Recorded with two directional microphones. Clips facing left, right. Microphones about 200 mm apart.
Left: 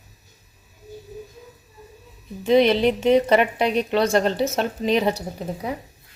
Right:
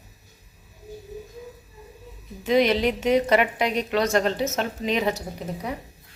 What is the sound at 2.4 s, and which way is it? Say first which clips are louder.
A woman's voice: left 4 dB; 30° left (ahead or behind).